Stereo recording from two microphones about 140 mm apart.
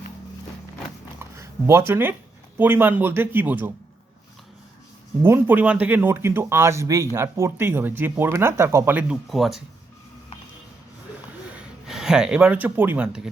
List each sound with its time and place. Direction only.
1.2 s a sound: 20° right (ahead or behind)
2.6 s speech: 15° right (ahead or behind)
5.2 s speech: 15° right (ahead or behind)
9.3 s speech: centre (ahead or behind)
11.5 s speech: 5° right (ahead or behind)